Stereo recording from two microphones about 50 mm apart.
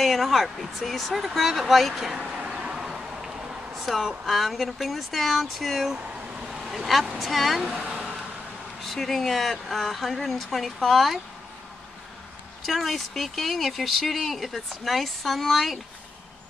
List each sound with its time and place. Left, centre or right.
0.0 s speech: centre
1.3 s a sound: centre
3.7 s a sound: centre
4.3 s speech: centre
5.9 s vehicle: right
6.7 s speech: centre
7.8 s a sound: right
8.8 s speech: centre
12.6 s speech: centre